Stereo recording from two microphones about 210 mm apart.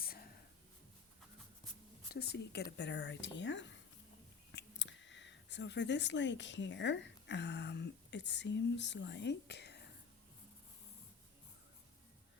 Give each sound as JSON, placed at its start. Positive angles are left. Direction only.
{"t": 0.0, "sound": "whispering", "side_deg": 45}
{"t": 2.1, "sound": "a woman's voice", "side_deg": 50}